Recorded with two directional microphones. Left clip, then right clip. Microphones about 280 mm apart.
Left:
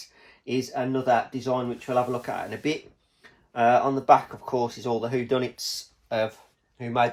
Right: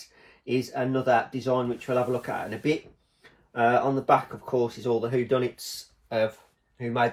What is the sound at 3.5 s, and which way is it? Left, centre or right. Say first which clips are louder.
Speech: left 2 dB; left.